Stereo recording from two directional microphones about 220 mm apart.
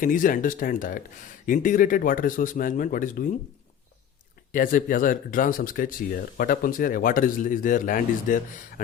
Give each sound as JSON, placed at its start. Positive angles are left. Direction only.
{"t": 0.0, "sound": "speech", "side_deg": 40}
{"t": 4.5, "sound": "speech", "side_deg": 40}